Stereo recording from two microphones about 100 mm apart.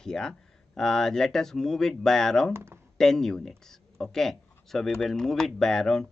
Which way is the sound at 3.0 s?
5° left (ahead or behind).